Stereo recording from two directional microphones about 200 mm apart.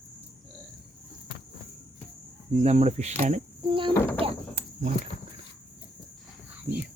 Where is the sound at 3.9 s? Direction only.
10° left (ahead or behind).